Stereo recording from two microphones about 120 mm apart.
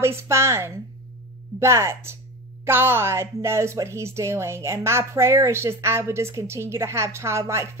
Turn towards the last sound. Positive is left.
turn(degrees=-20)  # may be behind; listen again after turning